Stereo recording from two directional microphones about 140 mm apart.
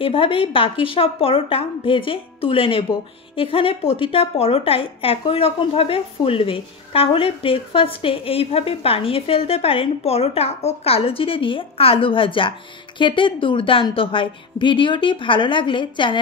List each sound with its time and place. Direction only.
0.0 s a woman's voice: 40° left (ahead or behind)